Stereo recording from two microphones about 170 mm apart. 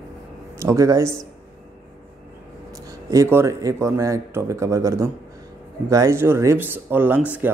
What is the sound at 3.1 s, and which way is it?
Speech, 15° right (ahead or behind).